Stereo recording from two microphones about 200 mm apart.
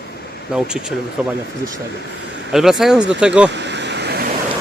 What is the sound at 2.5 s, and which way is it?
Speech, centre (ahead or behind).